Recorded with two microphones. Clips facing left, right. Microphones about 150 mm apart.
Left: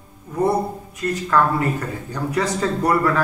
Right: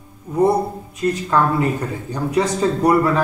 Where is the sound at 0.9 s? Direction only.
20° right (ahead or behind).